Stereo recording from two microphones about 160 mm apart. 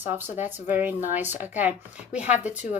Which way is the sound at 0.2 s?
10° right (ahead or behind).